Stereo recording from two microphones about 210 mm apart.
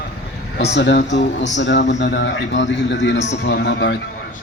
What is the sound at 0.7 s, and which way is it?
A man's voice, 55° left (ahead or behind).